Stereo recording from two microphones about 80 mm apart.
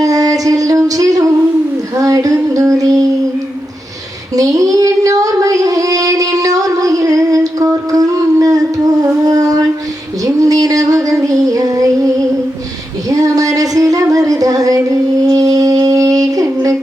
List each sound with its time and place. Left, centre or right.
0.0 s a sound: right
2.0 s child singing: right
4.4 s child singing: right
9.2 s a sound: right
10.2 s female singing: right
13.1 s music: right